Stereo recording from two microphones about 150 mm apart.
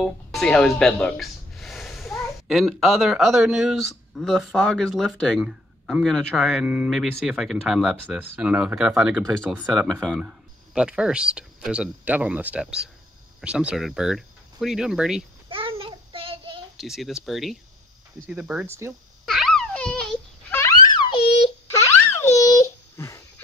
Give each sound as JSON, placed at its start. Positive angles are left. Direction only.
{"t": 0.0, "sound": "speech", "side_deg": 5}
{"t": 15.5, "sound": "child singing", "side_deg": -35}
{"t": 16.7, "sound": "speech", "side_deg": 0}
{"t": 18.7, "sound": "speech", "side_deg": -15}
{"t": 19.2, "sound": "a sound", "side_deg": 0}
{"t": 20.9, "sound": "a sound", "side_deg": 35}
{"t": 21.6, "sound": "wail", "side_deg": 20}